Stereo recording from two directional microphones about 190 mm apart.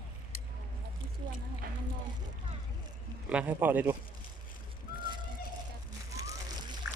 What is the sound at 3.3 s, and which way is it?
Speech, 5° right (ahead or behind).